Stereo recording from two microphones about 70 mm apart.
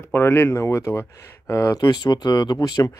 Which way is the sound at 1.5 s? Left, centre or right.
Left.